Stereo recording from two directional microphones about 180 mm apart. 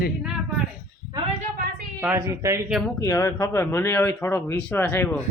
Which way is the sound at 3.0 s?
15° left (ahead or behind).